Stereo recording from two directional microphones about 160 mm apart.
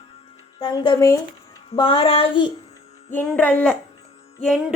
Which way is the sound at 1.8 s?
35° left (ahead or behind).